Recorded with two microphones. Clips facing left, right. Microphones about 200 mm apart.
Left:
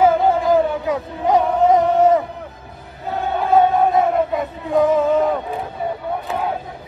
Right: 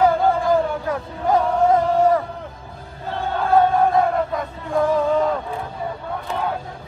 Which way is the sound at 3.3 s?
20° left (ahead or behind).